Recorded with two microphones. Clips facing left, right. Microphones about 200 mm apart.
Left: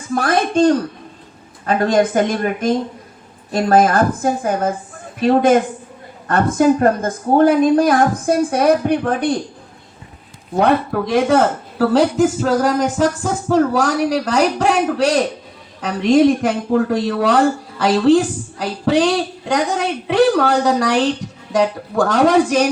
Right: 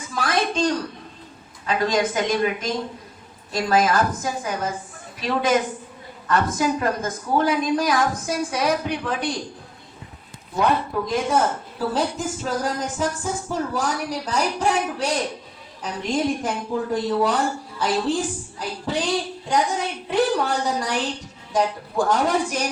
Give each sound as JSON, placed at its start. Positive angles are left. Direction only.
{"t": 0.1, "sound": "a woman's voice", "side_deg": 55}
{"t": 10.5, "sound": "speech", "side_deg": 60}